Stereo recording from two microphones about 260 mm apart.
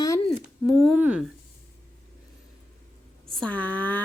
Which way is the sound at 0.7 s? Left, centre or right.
Centre.